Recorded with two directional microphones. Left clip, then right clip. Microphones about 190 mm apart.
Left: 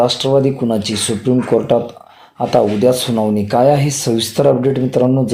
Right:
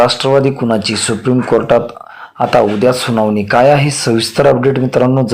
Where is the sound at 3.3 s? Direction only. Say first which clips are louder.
Right 3 dB; 10° right (ahead or behind).